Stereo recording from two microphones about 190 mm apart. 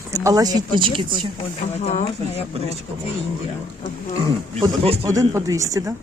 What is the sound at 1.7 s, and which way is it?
Speech, 35° left (ahead or behind).